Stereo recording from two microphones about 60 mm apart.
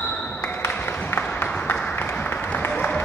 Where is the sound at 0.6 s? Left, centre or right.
Left.